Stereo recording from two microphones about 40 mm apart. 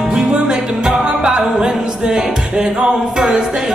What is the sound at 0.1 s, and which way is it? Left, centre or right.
Music, centre.